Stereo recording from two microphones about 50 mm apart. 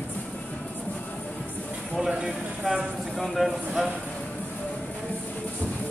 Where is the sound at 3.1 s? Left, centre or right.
Centre.